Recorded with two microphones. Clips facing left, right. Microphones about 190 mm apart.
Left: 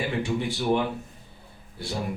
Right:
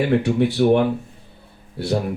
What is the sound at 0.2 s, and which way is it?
Speech, 65° right (ahead or behind).